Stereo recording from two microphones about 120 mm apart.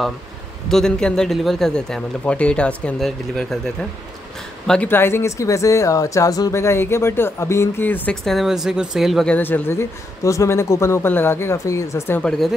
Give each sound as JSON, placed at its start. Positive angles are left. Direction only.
{"t": 0.7, "sound": "a man's voice", "side_deg": 5}
{"t": 4.9, "sound": "speech", "side_deg": 20}
{"t": 8.3, "sound": "a man's voice", "side_deg": 0}
{"t": 9.3, "sound": "speech", "side_deg": 15}
{"t": 12.2, "sound": "a man's voice", "side_deg": 5}